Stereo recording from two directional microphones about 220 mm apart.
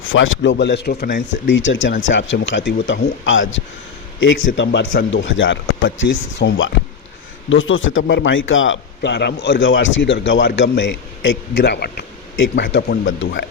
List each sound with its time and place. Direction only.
0.0 s speech: 60° left (ahead or behind)
9.0 s a man's voice: 50° left (ahead or behind)